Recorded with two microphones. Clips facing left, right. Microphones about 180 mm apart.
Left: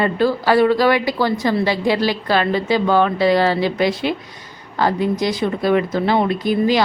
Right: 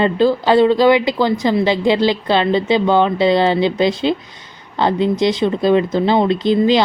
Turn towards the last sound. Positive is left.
turn(degrees=-25)  # may be behind; listen again after turning